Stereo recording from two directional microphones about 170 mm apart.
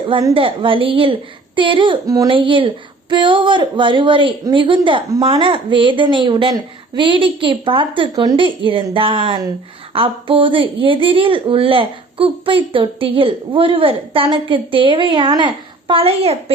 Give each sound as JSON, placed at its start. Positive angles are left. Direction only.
{"t": 0.1, "sound": "a woman's voice", "side_deg": -30}